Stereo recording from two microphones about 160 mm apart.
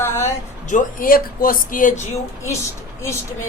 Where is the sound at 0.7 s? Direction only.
55° left (ahead or behind).